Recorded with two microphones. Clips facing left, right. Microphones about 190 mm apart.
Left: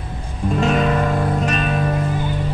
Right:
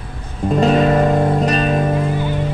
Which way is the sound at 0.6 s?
35° right (ahead or behind).